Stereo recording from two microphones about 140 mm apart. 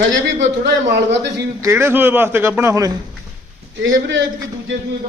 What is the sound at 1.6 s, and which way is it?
Speech, 20° right (ahead or behind).